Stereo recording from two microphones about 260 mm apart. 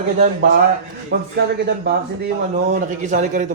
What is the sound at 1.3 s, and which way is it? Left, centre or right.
A man's voice, right.